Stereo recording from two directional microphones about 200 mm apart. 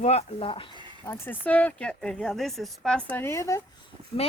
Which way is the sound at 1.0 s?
10° left (ahead or behind).